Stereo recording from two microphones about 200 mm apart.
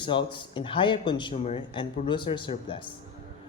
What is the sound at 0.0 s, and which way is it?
A man's voice, 25° left (ahead or behind).